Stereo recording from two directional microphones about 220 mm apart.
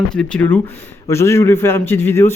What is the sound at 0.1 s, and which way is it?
A man's voice, 5° left (ahead or behind).